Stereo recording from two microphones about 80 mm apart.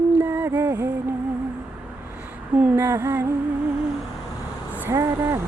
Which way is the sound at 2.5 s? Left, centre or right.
Centre.